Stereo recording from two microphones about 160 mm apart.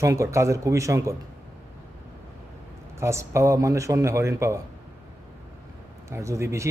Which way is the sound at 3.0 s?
15° right (ahead or behind).